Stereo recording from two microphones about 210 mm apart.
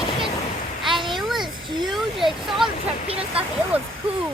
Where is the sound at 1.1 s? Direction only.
Centre (ahead or behind).